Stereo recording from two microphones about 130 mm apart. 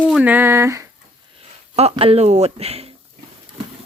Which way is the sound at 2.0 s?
50° right (ahead or behind).